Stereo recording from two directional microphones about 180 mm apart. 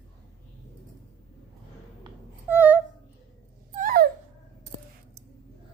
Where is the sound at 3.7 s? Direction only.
50° right (ahead or behind).